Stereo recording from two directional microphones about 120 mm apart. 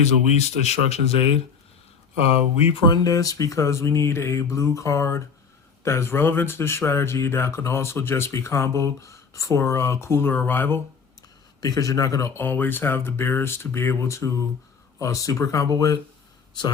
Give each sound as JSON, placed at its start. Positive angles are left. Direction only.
{"t": 0.3, "sound": "speech", "side_deg": 65}
{"t": 11.6, "sound": "speech", "side_deg": 30}